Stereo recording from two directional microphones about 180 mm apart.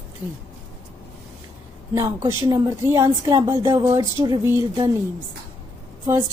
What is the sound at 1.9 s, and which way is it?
A woman's voice, 15° right (ahead or behind).